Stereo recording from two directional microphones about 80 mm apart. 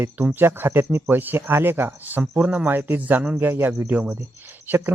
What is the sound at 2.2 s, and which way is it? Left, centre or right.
Speech, centre.